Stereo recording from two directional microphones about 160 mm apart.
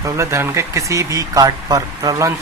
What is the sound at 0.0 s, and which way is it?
Speech, 15° right (ahead or behind).